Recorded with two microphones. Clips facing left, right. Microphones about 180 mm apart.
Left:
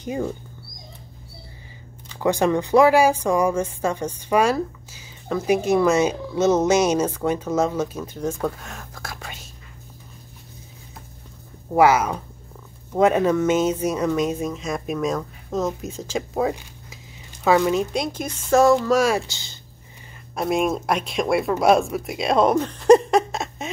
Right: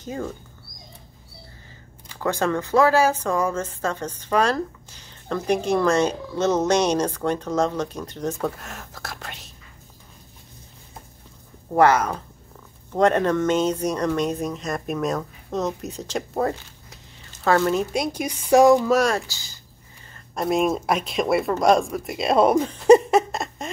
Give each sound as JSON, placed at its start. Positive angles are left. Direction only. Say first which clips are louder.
{"t": 0.0, "sound": "speech", "louder": "left 4 dB", "side_deg": 15}
{"t": 2.1, "sound": "speech", "louder": "left 4 dB", "side_deg": 15}
{"t": 11.7, "sound": "speech", "louder": "left 1 dB", "side_deg": 5}
{"t": 16.9, "sound": "a sound", "louder": "left 3 dB", "side_deg": 10}
{"t": 17.9, "sound": "a woman's voice", "louder": "right 1 dB", "side_deg": -10}
{"t": 18.9, "sound": "speech", "louder": "left 1 dB", "side_deg": 5}
{"t": 19.2, "sound": "speech", "louder": "left 2 dB", "side_deg": 25}
{"t": 20.3, "sound": "speech", "louder": "even", "side_deg": 0}